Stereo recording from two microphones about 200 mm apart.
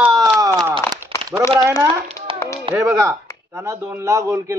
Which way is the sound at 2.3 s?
25° right (ahead or behind).